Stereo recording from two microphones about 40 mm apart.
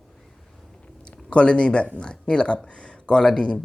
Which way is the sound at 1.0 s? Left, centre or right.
Left.